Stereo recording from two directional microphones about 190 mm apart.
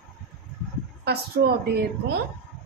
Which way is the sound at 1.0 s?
60° right (ahead or behind).